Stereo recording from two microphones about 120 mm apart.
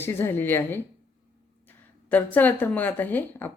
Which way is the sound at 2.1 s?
15° left (ahead or behind).